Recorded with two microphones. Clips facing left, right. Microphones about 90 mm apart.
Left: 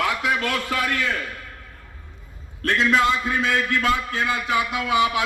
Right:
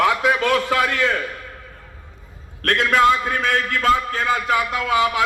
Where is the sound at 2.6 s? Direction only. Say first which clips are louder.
Right 3 dB; 60° right (ahead or behind).